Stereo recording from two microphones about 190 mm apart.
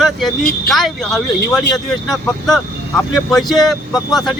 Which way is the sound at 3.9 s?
20° left (ahead or behind).